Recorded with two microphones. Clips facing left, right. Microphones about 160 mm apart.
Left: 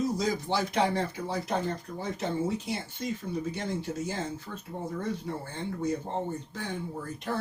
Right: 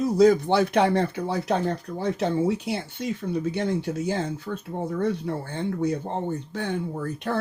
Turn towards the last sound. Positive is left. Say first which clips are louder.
# right 6 dB
turn(degrees=-65)  # may be behind; listen again after turning